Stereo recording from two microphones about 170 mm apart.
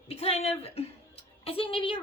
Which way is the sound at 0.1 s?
35° left (ahead or behind).